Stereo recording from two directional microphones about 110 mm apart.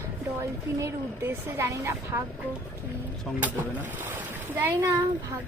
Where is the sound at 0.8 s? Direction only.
25° right (ahead or behind).